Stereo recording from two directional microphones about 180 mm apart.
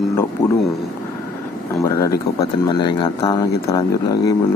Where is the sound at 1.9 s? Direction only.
20° left (ahead or behind).